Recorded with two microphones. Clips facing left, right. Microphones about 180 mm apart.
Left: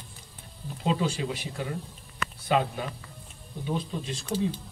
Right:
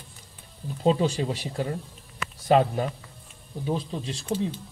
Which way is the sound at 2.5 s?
40° right (ahead or behind).